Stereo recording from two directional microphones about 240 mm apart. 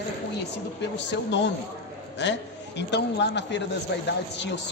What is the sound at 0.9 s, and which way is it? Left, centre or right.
A man's voice, left.